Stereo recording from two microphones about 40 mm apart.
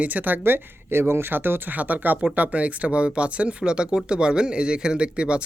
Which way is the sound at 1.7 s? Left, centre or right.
Right.